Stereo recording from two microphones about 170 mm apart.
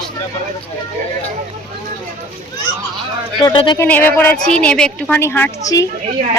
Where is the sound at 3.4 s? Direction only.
25° left (ahead or behind).